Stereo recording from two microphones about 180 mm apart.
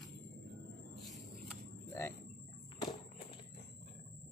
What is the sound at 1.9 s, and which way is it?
Cricket, 15° left (ahead or behind).